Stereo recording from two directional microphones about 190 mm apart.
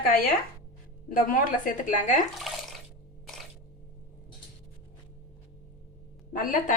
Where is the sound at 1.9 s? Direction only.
40° left (ahead or behind).